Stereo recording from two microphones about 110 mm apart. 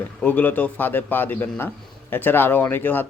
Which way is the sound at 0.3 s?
15° left (ahead or behind).